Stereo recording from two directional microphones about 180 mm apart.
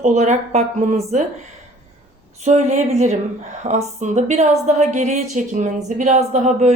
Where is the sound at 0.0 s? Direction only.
40° right (ahead or behind).